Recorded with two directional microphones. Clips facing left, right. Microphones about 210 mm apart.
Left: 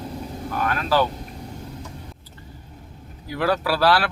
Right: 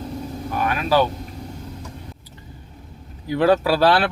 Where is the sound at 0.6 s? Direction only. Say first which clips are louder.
Right 2 dB; 15° right (ahead or behind).